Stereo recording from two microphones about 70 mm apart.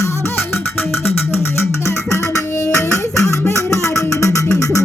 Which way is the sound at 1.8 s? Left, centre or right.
Left.